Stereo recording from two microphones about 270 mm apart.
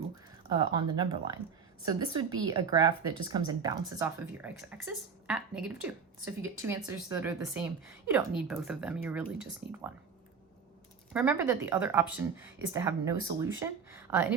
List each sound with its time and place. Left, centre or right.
0.5 s speech: centre
11.1 s speech: centre